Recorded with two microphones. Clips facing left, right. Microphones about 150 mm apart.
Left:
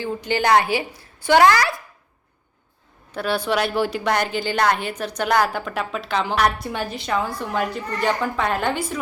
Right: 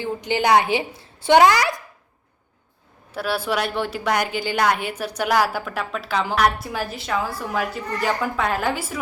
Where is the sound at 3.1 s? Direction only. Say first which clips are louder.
Left 2 dB; 5° right (ahead or behind).